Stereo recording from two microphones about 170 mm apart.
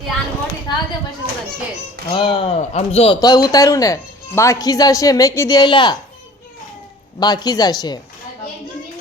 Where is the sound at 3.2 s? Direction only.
20° left (ahead or behind).